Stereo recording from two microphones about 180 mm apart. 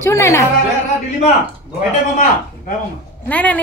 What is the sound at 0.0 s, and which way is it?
Speech, 15° left (ahead or behind).